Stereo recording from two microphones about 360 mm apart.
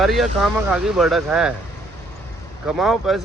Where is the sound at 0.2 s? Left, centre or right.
Centre.